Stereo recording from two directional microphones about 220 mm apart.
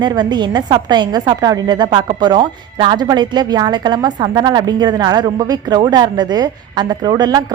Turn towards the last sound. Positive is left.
turn(degrees=-20)  # may be behind; listen again after turning